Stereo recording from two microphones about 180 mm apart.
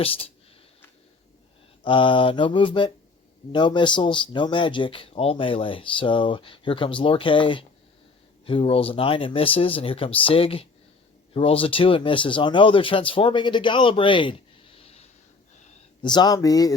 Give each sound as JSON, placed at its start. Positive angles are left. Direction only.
{"t": 1.8, "sound": "speech", "side_deg": 30}
{"t": 16.0, "sound": "speech", "side_deg": 25}